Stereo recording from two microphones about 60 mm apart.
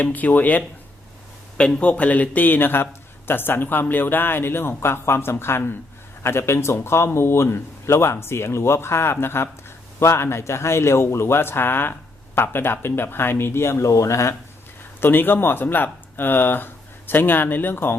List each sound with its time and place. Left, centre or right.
0.0 s speech: left
1.5 s a man's voice: centre; by 14.3 s left
15.0 s a man's voice: left